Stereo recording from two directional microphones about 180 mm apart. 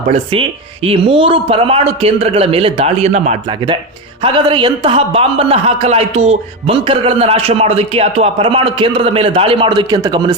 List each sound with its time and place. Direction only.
0.9 s a man's voice: 30° right (ahead or behind)
4.2 s a man's voice: 25° right (ahead or behind)